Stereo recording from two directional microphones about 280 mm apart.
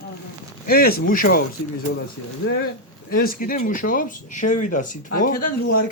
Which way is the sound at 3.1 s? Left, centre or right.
Left.